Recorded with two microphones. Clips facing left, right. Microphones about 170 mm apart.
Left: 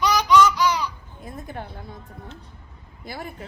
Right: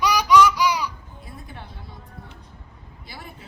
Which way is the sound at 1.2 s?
45° left (ahead or behind).